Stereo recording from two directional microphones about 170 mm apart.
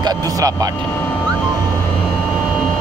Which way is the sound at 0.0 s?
20° right (ahead or behind).